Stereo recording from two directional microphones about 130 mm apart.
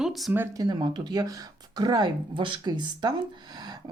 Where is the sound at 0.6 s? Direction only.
35° right (ahead or behind).